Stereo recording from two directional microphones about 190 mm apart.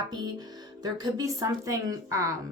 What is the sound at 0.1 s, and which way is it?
Speech, 20° right (ahead or behind).